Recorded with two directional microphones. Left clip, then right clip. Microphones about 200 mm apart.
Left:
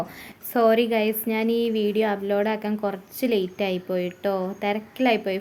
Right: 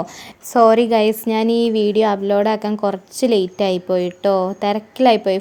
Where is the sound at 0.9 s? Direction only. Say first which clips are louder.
Right 8 dB; 35° right (ahead or behind).